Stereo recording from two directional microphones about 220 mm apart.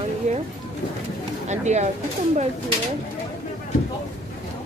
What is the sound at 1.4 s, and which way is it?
Speech, 30° right (ahead or behind).